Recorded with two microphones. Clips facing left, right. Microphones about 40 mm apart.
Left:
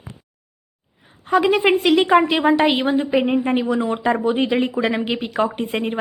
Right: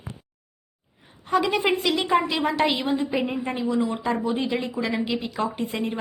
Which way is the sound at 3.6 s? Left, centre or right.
Left.